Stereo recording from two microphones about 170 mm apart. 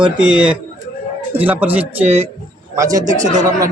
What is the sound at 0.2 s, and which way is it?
A man's voice, 5° right (ahead or behind).